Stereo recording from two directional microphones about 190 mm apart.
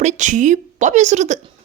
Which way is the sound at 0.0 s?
40° right (ahead or behind).